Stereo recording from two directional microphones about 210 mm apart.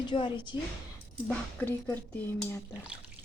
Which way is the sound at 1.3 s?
10° left (ahead or behind).